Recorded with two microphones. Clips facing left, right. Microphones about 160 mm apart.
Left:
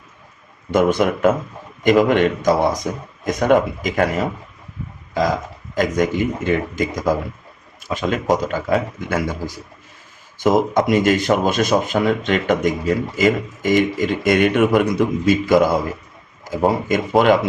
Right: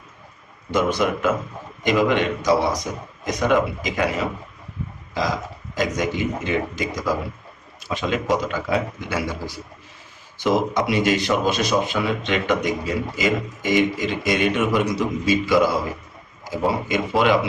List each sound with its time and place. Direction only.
0.7 s speech: 50° left (ahead or behind)
5.7 s speech: 50° left (ahead or behind)
16.9 s speech: 45° left (ahead or behind)